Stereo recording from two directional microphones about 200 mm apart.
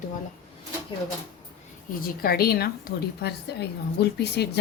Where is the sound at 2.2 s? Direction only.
50° left (ahead or behind).